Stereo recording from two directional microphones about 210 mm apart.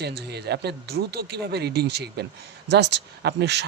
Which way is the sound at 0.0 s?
50° right (ahead or behind).